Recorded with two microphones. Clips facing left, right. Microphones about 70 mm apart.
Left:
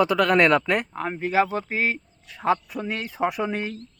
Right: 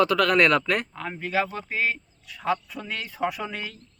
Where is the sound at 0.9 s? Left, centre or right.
Left.